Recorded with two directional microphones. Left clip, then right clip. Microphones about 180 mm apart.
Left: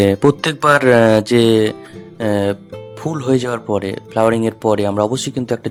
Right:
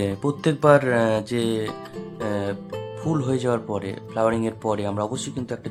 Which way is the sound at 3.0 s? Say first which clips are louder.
Left 7 dB; 35° left (ahead or behind).